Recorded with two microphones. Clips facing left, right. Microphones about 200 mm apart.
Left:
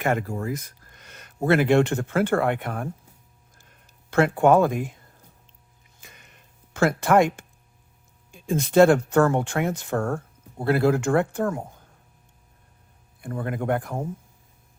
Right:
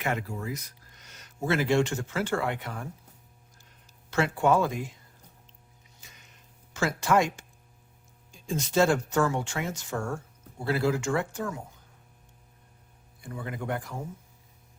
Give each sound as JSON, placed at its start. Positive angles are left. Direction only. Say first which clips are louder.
{"t": 0.0, "sound": "speech", "louder": "left 6 dB", "side_deg": 50}
{"t": 6.0, "sound": "a sound", "louder": "left 5 dB", "side_deg": 55}
{"t": 8.3, "sound": "speech", "louder": "left 6 dB", "side_deg": 55}
{"t": 13.2, "sound": "speech", "louder": "left 8 dB", "side_deg": 55}